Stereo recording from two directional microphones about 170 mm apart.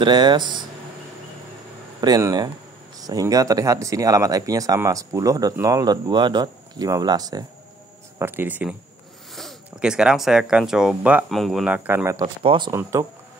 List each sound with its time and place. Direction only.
0.0 s speech: 25° right (ahead or behind)
2.0 s speech: 20° right (ahead or behind)
9.3 s speech: centre (ahead or behind); by 12.3 s 15° right (ahead or behind)
12.4 s speech: 25° right (ahead or behind)